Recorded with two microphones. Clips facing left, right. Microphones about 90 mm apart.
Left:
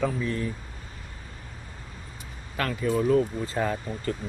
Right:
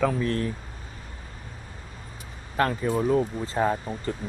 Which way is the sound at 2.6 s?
35° right (ahead or behind).